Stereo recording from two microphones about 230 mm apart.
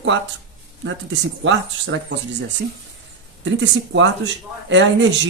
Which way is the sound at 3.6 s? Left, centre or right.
Right.